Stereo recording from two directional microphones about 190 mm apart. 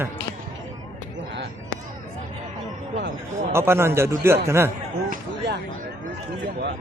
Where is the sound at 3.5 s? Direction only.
10° right (ahead or behind).